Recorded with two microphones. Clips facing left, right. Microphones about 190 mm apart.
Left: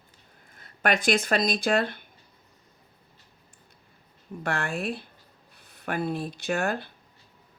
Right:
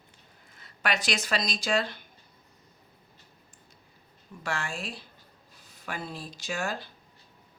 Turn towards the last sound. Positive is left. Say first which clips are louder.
# left 6 dB
turn(degrees=60)  # may be behind; listen again after turning